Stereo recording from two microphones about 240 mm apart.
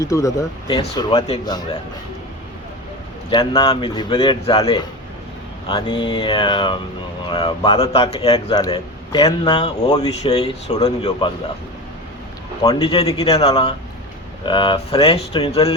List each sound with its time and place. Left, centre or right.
0.0 s speech: centre
3.2 s speech: centre
12.6 s speech: left